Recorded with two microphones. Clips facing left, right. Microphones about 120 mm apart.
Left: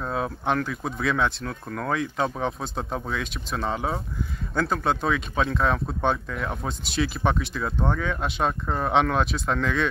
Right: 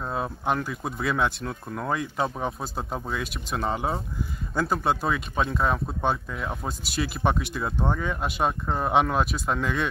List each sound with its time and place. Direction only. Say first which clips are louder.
0.0 s a sound: left 1 dB; 5° right (ahead or behind)
0.7 s speech: left 2 dB; 10° right (ahead or behind)
1.4 s speech: even; 25° right (ahead or behind)
1.8 s speech: left 1 dB; 5° right (ahead or behind)